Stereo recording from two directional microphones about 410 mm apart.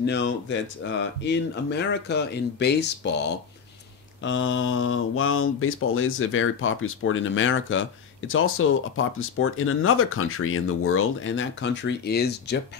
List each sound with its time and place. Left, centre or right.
0.0 s speech: left
4.2 s speech: left